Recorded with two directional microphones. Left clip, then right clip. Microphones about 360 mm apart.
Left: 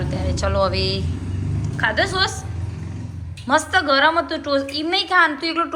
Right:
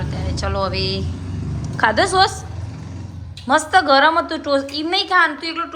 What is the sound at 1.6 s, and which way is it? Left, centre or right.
Speech, centre.